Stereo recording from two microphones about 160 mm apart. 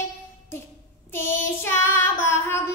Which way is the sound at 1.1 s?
15° left (ahead or behind).